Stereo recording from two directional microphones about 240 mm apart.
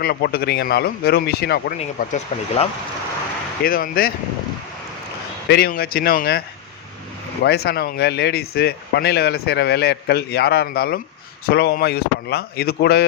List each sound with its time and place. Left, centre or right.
0.0 s speech: left
1.8 s speech: left
3.6 s speech: left
5.5 s speech: left
7.4 s speech: left